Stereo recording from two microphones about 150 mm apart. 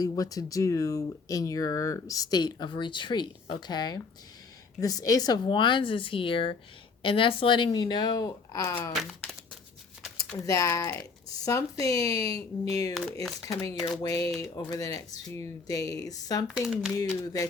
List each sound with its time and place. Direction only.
0.0 s speech: 25° left (ahead or behind)
9.0 s speech: centre (ahead or behind)
10.4 s speech: 20° left (ahead or behind)
16.6 s speech: 5° right (ahead or behind)
17.0 s speech: 20° left (ahead or behind)